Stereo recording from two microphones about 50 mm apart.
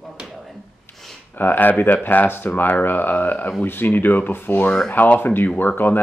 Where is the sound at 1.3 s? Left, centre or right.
Left.